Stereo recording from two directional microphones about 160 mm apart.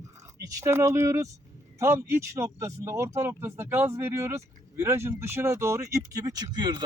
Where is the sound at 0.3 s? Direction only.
15° right (ahead or behind).